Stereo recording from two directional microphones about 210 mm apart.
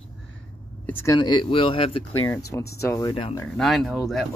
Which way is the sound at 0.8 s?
10° left (ahead or behind).